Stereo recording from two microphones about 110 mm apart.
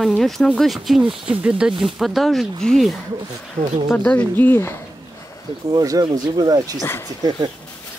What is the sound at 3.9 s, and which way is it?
Speech, 15° left (ahead or behind).